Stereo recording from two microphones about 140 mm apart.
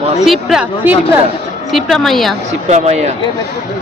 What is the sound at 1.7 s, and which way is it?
Speech, centre (ahead or behind).